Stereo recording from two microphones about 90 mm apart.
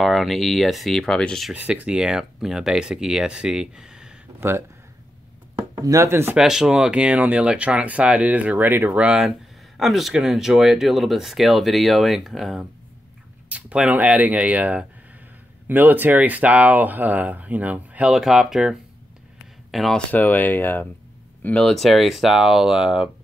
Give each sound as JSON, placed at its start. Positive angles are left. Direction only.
{"t": 0.0, "sound": "speech", "side_deg": 0}
{"t": 1.5, "sound": "speech", "side_deg": -15}
{"t": 4.4, "sound": "speech", "side_deg": -25}
{"t": 5.8, "sound": "speech", "side_deg": -40}
{"t": 6.0, "sound": "speech", "side_deg": -25}
{"t": 6.3, "sound": "speech", "side_deg": -5}
{"t": 9.0, "sound": "speech", "side_deg": -10}
{"t": 13.5, "sound": "speech", "side_deg": -15}
{"t": 18.1, "sound": "speech", "side_deg": -5}
{"t": 20.1, "sound": "speech", "side_deg": 20}
{"t": 21.6, "sound": "speech", "side_deg": 0}